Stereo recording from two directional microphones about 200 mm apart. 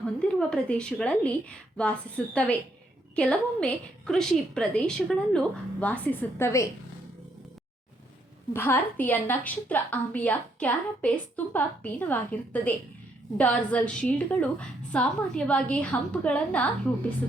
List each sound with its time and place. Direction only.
0.0 s a woman's voice: 5° left (ahead or behind)
8.5 s a woman's voice: 10° left (ahead or behind)